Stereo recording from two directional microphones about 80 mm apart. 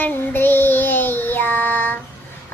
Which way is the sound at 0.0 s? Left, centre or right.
Left.